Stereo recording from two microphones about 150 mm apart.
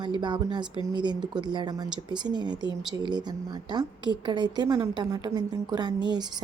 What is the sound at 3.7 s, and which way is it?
A woman's voice, 30° right (ahead or behind).